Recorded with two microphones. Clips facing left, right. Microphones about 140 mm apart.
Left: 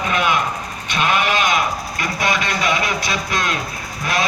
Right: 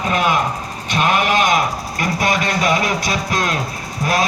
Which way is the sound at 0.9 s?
45° right (ahead or behind).